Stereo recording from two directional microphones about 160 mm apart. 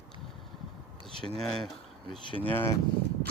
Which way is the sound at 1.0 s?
35° right (ahead or behind).